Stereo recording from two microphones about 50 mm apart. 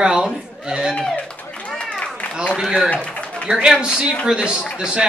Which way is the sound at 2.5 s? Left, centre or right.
Centre.